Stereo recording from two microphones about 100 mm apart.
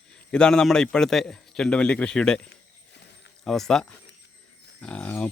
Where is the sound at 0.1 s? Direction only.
10° left (ahead or behind).